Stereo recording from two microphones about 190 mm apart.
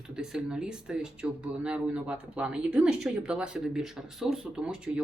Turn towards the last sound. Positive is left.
turn(degrees=-5)  # may be behind; listen again after turning